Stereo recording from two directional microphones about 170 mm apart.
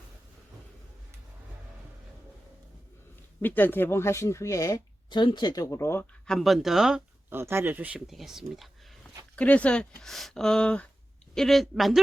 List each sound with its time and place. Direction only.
3.4 s speech: 10° left (ahead or behind)
6.2 s speech: centre (ahead or behind)